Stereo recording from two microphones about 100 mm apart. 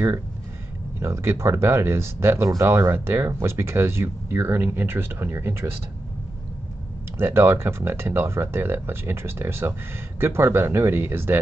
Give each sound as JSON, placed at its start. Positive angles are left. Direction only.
{"t": 0.9, "sound": "speech", "side_deg": -25}
{"t": 7.2, "sound": "speech", "side_deg": -25}